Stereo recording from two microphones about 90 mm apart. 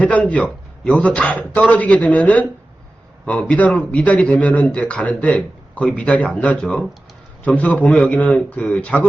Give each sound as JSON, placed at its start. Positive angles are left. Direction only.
{"t": 0.0, "sound": "speech", "side_deg": 15}